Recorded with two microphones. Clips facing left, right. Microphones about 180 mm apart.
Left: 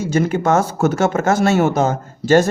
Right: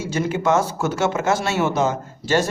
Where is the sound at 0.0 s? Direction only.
50° left (ahead or behind).